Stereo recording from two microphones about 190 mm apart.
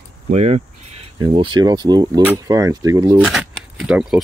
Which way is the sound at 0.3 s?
35° right (ahead or behind).